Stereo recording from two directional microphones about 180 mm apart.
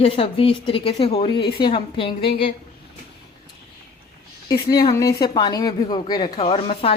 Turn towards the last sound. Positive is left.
turn(degrees=35)  # may be behind; listen again after turning